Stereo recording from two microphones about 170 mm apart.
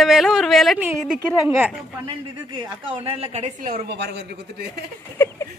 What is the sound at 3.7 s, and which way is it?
Speech, 85° right.